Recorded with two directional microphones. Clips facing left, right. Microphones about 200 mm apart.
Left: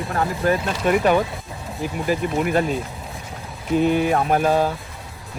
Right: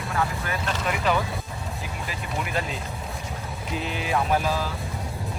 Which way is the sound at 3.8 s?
50° left (ahead or behind).